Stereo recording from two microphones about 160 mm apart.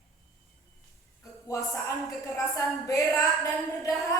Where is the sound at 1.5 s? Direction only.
20° left (ahead or behind).